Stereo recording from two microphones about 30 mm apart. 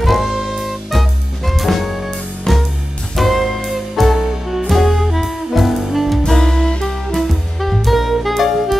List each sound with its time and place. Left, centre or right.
0.0 s music: centre
3.2 s music: centre
6.4 s music: centre
7.2 s music: centre